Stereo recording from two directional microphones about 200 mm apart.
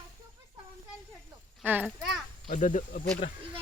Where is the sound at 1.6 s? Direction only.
10° right (ahead or behind).